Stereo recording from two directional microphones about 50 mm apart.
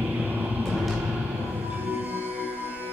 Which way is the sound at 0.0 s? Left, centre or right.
Right.